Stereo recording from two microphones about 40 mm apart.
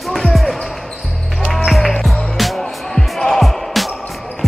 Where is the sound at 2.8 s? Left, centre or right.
Centre.